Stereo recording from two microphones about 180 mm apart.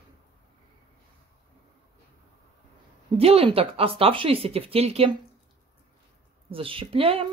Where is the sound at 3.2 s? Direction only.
30° right (ahead or behind).